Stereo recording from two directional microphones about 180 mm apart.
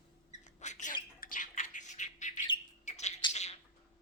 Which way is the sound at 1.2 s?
50° left (ahead or behind).